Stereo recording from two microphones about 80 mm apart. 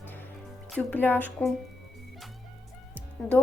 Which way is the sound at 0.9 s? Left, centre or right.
Left.